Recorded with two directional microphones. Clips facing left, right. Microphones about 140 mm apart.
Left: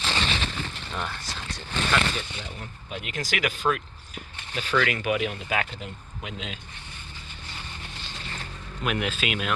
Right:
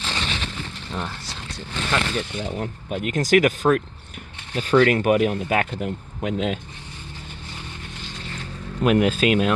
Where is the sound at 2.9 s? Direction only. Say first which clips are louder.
Right 13 dB; 45° right (ahead or behind).